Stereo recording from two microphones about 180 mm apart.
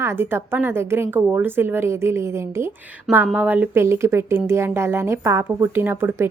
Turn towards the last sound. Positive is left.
turn(degrees=-10)  # may be behind; listen again after turning